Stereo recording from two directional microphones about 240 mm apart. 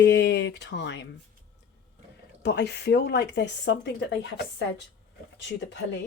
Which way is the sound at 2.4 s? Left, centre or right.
Left.